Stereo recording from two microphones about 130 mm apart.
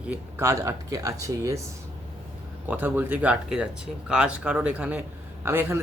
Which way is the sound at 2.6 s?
15° right (ahead or behind).